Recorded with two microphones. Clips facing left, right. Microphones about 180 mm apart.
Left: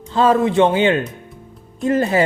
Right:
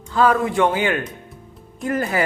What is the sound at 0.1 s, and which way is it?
Speech, 25° left (ahead or behind).